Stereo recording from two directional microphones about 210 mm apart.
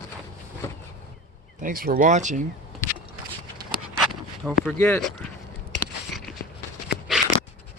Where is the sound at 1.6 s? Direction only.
45° right (ahead or behind).